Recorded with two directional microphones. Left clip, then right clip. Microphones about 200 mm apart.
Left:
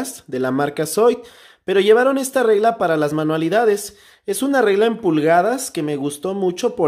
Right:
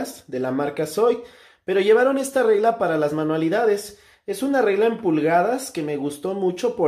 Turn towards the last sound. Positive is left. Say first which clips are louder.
# left 3 dB
turn(degrees=35)  # may be behind; listen again after turning